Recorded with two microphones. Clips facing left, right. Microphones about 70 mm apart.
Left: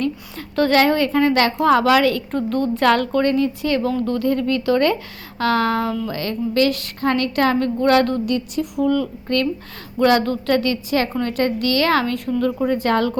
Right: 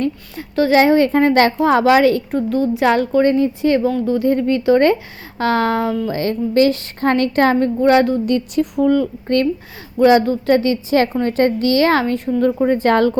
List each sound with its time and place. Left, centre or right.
0.7 s a woman's voice: right
2.3 s speech: centre
3.3 s speech: right
3.9 s speech: centre
4.2 s speech: right
7.6 s speech: centre
8.3 s a woman's voice: right
10.0 s a woman's voice: centre; by 13.1 s right